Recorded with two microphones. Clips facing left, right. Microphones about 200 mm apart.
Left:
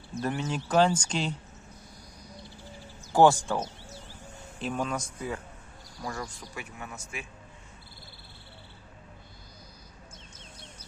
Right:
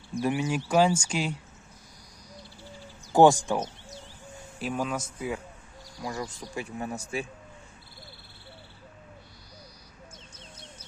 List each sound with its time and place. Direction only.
0.1 s speech: 10° right (ahead or behind)
3.1 s speech: 15° right (ahead or behind); by 7.3 s 35° right (ahead or behind)